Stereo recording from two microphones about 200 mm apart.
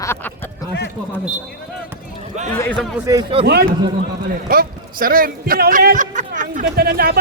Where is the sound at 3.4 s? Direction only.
55° right (ahead or behind).